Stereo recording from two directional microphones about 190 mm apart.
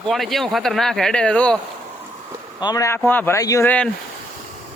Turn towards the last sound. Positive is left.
turn(degrees=10)  # may be behind; listen again after turning